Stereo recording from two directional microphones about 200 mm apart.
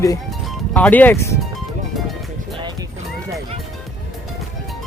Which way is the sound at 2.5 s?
20° right (ahead or behind).